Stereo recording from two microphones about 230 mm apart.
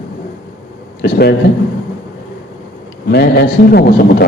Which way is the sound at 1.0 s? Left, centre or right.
Left.